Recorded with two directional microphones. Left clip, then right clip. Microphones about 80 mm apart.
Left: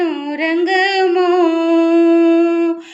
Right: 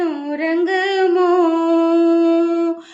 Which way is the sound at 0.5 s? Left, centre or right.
Right.